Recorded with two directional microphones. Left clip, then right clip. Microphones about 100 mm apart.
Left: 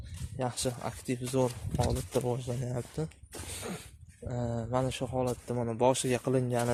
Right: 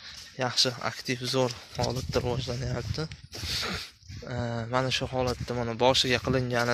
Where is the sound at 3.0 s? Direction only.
25° left (ahead or behind).